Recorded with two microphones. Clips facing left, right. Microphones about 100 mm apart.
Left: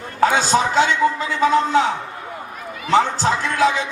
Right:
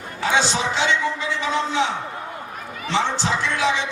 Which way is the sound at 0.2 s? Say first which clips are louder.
Left 5 dB; 45° left (ahead or behind).